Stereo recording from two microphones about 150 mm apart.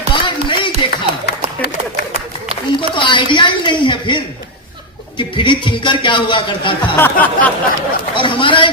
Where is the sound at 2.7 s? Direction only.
30° left (ahead or behind).